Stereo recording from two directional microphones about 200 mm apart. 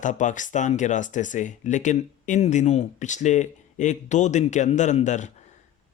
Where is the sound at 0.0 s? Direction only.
40° left (ahead or behind).